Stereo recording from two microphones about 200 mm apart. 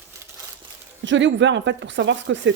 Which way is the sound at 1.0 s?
65° right (ahead or behind).